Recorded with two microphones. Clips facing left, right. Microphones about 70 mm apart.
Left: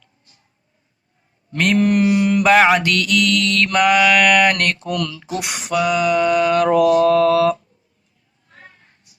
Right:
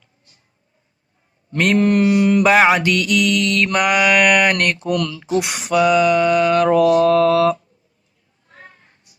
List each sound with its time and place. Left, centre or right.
1.5 s mantra: centre; by 5.5 s right
5.6 s mantra: right